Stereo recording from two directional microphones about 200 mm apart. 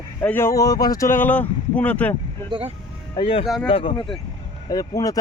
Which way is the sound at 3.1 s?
25° left (ahead or behind).